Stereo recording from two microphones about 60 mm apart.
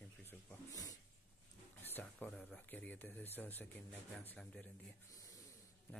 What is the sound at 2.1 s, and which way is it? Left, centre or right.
Speech, left.